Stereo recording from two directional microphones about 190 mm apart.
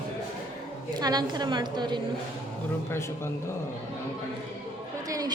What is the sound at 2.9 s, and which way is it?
Speech, 15° left (ahead or behind).